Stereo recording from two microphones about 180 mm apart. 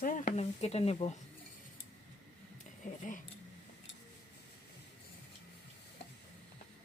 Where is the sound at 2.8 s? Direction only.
45° left (ahead or behind).